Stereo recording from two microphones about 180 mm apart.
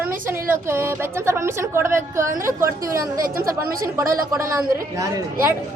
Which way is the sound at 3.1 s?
50° right (ahead or behind).